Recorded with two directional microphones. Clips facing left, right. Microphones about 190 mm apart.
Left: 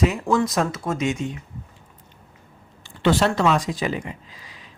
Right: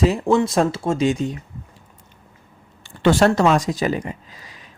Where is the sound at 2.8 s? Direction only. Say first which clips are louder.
Right 4 dB; 50° right (ahead or behind).